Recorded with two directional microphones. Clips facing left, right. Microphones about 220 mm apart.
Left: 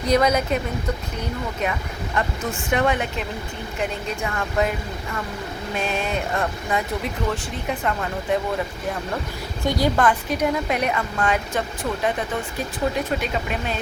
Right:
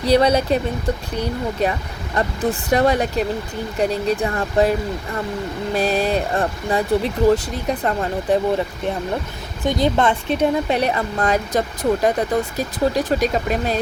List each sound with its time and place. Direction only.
0.0 s speech: 30° right (ahead or behind)
1.6 s speech: 35° right (ahead or behind)
5.7 s speech: 35° right (ahead or behind)
9.6 s speech: 20° right (ahead or behind); by 13.7 s 40° right (ahead or behind)